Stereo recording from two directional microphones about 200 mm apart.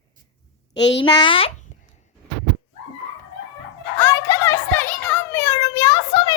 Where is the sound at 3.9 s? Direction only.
15° left (ahead or behind).